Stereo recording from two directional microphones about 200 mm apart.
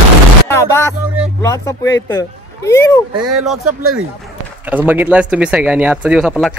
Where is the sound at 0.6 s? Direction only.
15° left (ahead or behind).